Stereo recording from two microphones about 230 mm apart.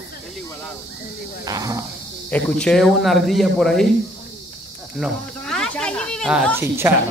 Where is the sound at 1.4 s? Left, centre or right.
Centre.